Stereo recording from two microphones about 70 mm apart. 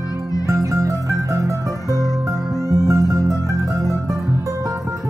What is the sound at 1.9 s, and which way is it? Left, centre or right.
Music, left.